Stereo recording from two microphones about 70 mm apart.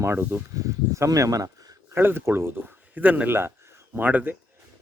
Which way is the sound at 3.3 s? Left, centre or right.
Right.